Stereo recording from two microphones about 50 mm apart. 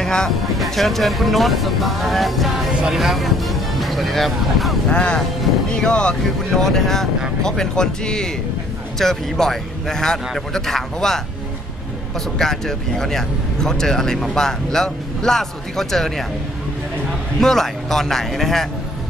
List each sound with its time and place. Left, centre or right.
0.0 s speech: centre
0.6 s speech: centre
4.8 s speech: left
6.6 s speech: centre
12.4 s speech: centre
17.4 s speech: centre